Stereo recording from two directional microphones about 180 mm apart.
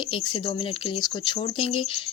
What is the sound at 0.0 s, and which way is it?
Speech, 30° left (ahead or behind).